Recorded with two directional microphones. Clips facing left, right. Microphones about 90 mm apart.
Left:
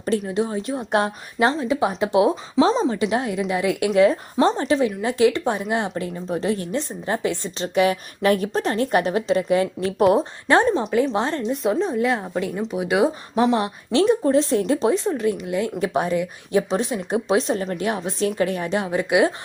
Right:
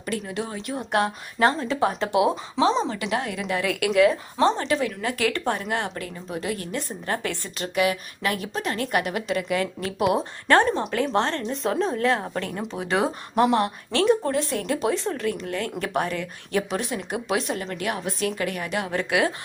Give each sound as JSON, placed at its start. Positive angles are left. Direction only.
{"t": 0.0, "sound": "a woman's voice", "side_deg": 30}
{"t": 2.1, "sound": "speech", "side_deg": 30}
{"t": 2.9, "sound": "speech", "side_deg": 25}
{"t": 10.2, "sound": "speech", "side_deg": 20}
{"t": 10.8, "sound": "a woman's voice", "side_deg": 5}